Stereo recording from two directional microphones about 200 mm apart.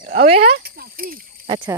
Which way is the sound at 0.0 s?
40° right (ahead or behind).